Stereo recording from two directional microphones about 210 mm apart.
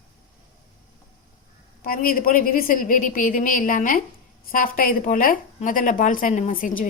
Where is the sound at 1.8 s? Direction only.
45° left (ahead or behind).